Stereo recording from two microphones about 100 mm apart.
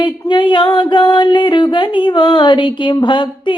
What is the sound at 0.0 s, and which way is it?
Music, 50° left (ahead or behind).